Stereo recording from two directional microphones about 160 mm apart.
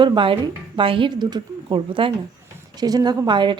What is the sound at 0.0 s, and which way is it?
A woman's voice, 30° right (ahead or behind).